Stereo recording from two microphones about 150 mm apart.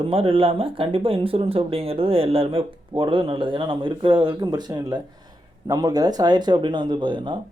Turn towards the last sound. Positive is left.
turn(degrees=-30)  # may be behind; listen again after turning